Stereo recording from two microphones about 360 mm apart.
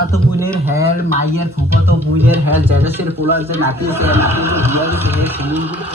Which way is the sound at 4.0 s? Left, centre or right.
Centre.